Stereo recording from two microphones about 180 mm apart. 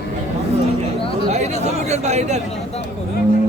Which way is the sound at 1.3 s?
40° right (ahead or behind).